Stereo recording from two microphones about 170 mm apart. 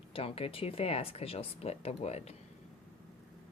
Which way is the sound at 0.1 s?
35° left (ahead or behind).